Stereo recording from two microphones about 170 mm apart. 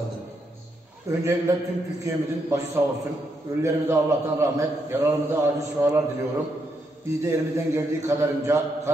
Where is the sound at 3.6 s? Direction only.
15° right (ahead or behind).